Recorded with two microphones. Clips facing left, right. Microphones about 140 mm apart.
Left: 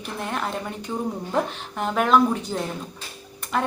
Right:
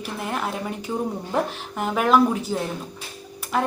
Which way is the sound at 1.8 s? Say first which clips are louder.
Right 1 dB; 5° right (ahead or behind).